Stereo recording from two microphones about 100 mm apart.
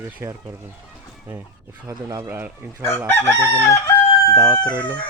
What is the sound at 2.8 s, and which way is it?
Chicken, 25° left (ahead or behind).